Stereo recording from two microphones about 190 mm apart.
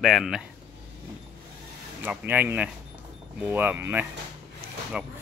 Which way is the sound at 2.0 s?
10° right (ahead or behind).